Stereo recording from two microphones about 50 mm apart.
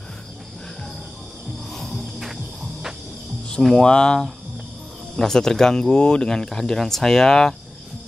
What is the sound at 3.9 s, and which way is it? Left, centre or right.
Speech, centre.